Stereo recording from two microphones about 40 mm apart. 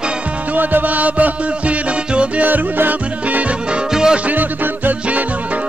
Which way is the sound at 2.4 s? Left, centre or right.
Right.